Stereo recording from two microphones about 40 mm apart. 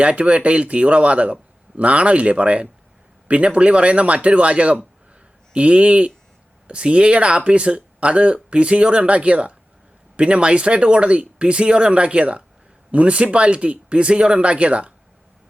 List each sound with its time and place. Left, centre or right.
0.0 s a man's voice: right